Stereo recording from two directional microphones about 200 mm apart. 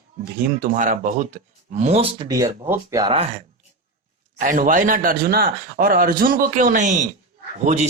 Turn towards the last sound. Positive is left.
turn(degrees=-35)  # may be behind; listen again after turning